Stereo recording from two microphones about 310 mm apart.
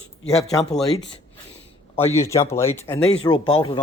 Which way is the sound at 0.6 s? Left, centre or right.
Centre.